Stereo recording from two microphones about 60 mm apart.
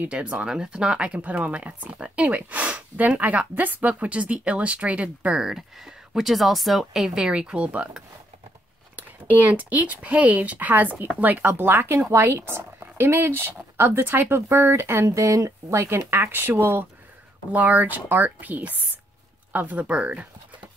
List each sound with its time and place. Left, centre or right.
0.1 s speech: centre; by 15.0 s right
15.0 s speech: right
17.5 s speech: right